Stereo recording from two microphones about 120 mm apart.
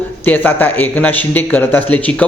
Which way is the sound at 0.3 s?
15° left (ahead or behind).